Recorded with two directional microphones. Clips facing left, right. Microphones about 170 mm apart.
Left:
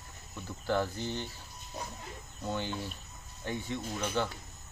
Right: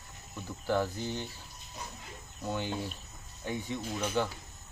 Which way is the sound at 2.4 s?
10° right (ahead or behind).